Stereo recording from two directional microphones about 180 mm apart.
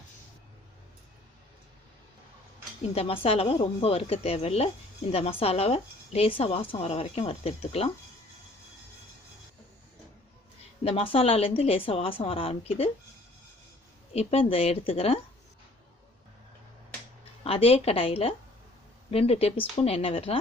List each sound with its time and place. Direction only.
2.9 s a woman's voice: 35° left (ahead or behind)
10.8 s a woman's voice: 30° left (ahead or behind)
14.1 s a woman's voice: 35° left (ahead or behind)
17.4 s a woman's voice: 35° left (ahead or behind)